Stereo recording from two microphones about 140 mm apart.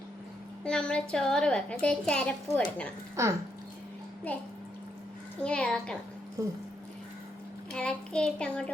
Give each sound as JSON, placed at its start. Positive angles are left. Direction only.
{"t": 0.6, "sound": "a child's voice", "side_deg": 5}
{"t": 3.2, "sound": "speech", "side_deg": -20}
{"t": 5.4, "sound": "a child's voice", "side_deg": 5}
{"t": 6.4, "sound": "speech", "side_deg": -25}
{"t": 7.7, "sound": "a child's voice", "side_deg": 5}